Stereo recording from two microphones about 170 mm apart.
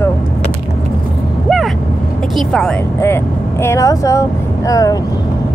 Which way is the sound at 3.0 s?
15° left (ahead or behind).